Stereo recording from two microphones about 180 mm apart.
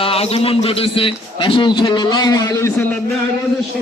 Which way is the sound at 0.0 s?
35° left (ahead or behind).